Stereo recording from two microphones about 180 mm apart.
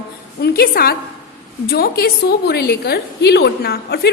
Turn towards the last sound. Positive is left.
turn(degrees=60)  # may be behind; listen again after turning